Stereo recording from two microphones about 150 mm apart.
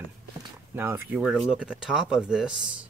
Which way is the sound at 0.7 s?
15° right (ahead or behind).